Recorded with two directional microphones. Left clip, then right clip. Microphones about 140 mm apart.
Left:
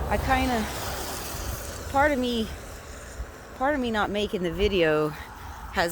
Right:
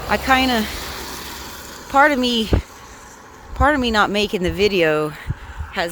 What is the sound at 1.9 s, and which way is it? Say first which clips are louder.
Speech: right 8 dB; 45° right (ahead or behind).